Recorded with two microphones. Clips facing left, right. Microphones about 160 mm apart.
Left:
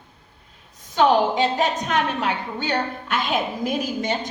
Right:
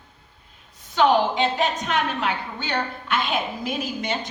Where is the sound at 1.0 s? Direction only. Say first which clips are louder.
Left 1 dB; 40° left (ahead or behind).